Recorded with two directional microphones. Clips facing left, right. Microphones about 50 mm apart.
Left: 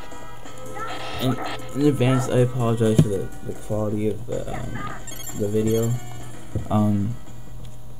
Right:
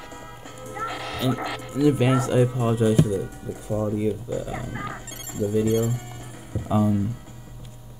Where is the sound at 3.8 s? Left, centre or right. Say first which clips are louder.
Even; centre.